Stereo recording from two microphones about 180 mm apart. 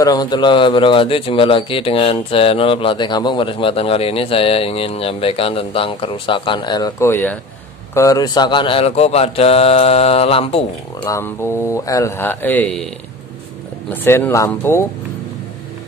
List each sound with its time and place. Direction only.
0.0 s speech: 20° left (ahead or behind)
11.1 s speech: 15° left (ahead or behind)
13.8 s speech: 10° left (ahead or behind)